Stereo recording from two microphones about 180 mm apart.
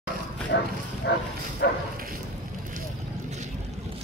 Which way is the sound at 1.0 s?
70° left (ahead or behind).